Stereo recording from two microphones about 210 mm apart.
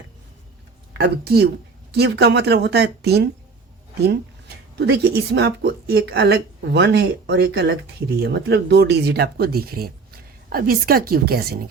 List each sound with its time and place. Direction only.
0.9 s speech: 50° right (ahead or behind)